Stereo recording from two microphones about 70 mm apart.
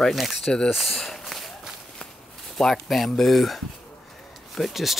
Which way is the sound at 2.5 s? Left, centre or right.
Centre.